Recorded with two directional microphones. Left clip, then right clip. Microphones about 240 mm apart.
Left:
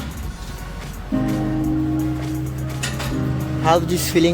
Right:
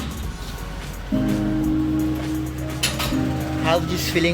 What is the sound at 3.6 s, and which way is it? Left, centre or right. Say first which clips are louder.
Speech: left 4 dB; left.